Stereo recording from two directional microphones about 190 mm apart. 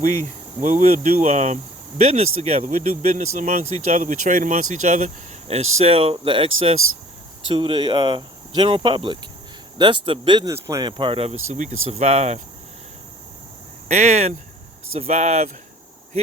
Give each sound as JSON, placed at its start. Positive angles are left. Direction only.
{"t": 0.6, "sound": "speech", "side_deg": -40}
{"t": 11.4, "sound": "speech", "side_deg": -40}
{"t": 13.8, "sound": "speech", "side_deg": -35}